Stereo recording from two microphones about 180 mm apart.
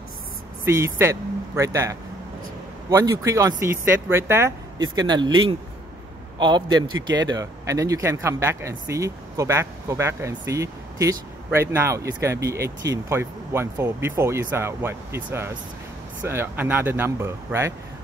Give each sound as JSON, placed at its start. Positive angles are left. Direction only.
{"t": 0.7, "sound": "speech", "side_deg": -15}
{"t": 6.4, "sound": "a man's voice", "side_deg": -25}
{"t": 16.3, "sound": "speech", "side_deg": -10}